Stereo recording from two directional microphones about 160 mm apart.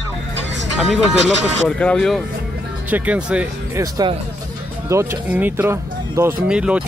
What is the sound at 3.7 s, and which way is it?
Speech, 25° right (ahead or behind).